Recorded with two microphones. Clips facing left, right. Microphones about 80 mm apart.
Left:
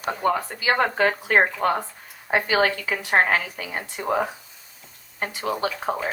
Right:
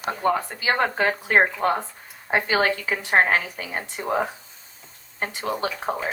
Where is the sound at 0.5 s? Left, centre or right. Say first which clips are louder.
Left 1 dB; right.